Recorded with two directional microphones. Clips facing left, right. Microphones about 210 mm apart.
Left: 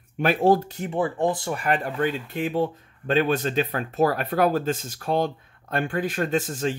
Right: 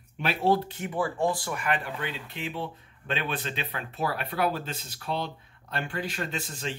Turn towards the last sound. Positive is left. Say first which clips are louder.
# left 10 dB
turn(degrees=45)  # may be behind; listen again after turning